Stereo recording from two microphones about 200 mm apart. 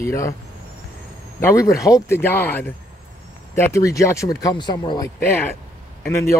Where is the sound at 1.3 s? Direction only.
15° left (ahead or behind).